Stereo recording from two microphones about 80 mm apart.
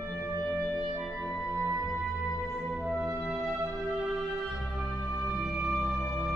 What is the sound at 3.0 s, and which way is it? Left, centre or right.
Music, right.